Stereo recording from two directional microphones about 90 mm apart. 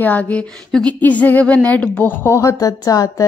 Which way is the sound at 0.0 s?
15° left (ahead or behind).